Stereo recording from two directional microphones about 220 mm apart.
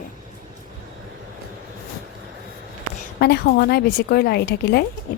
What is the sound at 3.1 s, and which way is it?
A woman's voice, 45° left (ahead or behind).